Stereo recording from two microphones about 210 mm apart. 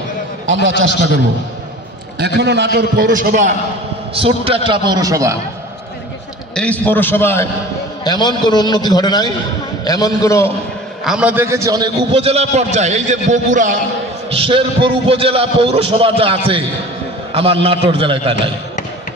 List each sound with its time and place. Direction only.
0.5 s a man's voice: 65° right (ahead or behind)
2.1 s a man's voice: 55° right (ahead or behind); by 3.5 s 35° right (ahead or behind)
4.1 s a man's voice: 25° right (ahead or behind)
6.5 s a man's voice: 5° left (ahead or behind)
11.1 s a man's voice: 5° right (ahead or behind); by 13.7 s 35° right (ahead or behind)
14.3 s a man's voice: 25° right (ahead or behind)